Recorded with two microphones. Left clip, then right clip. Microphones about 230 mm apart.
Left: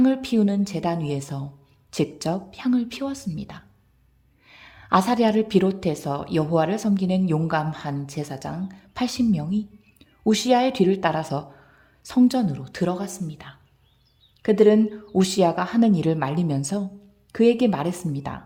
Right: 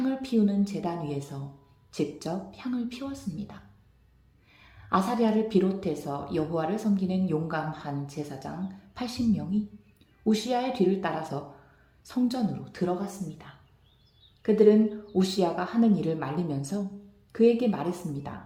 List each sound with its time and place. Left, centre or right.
0.0 s speech: left